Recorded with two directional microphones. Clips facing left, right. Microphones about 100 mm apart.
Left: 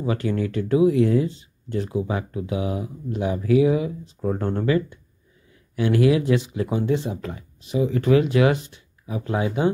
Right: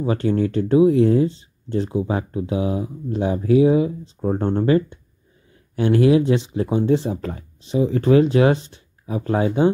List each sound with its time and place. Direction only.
0.0 s speech: 35° right (ahead or behind)